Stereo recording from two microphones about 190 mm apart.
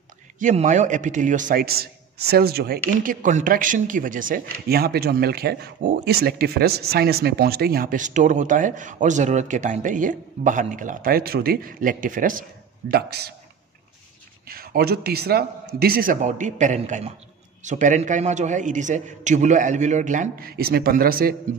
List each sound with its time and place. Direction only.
0.4 s speech: 40° right (ahead or behind)
12.9 s a man's voice: 55° right (ahead or behind)
14.5 s a man's voice: 50° right (ahead or behind)